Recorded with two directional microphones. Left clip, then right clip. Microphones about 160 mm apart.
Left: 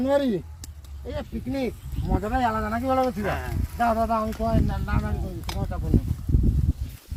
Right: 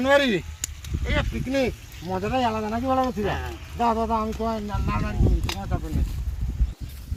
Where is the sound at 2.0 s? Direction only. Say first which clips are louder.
Right 1 dB; 45° right (ahead or behind).